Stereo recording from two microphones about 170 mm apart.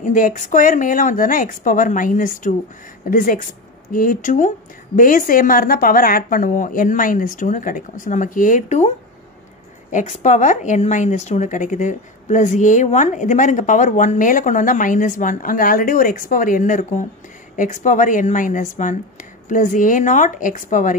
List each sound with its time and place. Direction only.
0.0 s a woman's voice: 50° left (ahead or behind)